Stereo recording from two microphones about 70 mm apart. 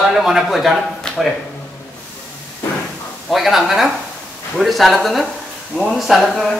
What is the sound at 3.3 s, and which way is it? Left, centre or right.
A man's voice, centre.